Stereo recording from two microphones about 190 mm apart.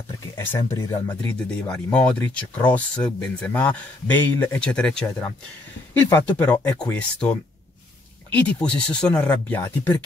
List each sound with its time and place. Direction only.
0.7 s speech: 20° left (ahead or behind)
1.2 s speech: 5° left (ahead or behind)